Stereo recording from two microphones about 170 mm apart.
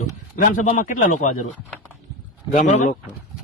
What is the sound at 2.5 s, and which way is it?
Speech, 45° left (ahead or behind).